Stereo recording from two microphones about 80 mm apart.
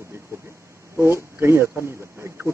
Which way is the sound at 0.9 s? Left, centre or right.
Right.